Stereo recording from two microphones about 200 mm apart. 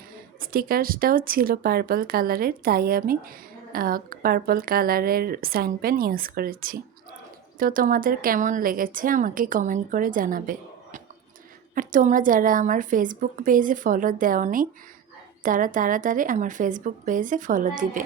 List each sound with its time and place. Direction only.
0.3 s a woman's voice: 45° right (ahead or behind)